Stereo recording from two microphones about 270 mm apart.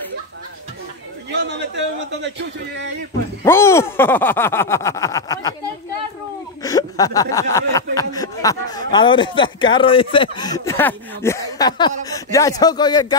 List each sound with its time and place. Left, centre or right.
1.3 s a man's voice: right
3.4 s speech: centre
6.6 s speech: centre